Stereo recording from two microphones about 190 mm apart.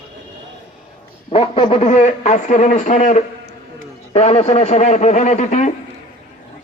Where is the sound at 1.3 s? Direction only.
30° left (ahead or behind).